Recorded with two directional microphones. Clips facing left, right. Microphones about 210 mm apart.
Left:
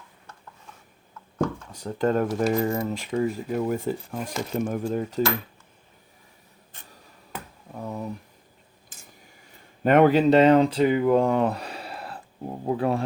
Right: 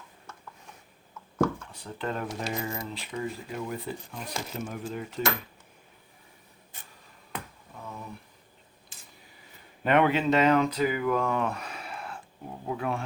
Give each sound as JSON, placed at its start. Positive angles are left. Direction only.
{"t": 1.7, "sound": "speech", "side_deg": 45}
{"t": 7.3, "sound": "finger snapping", "side_deg": 5}
{"t": 7.8, "sound": "a sound", "side_deg": 45}
{"t": 9.8, "sound": "speech", "side_deg": 45}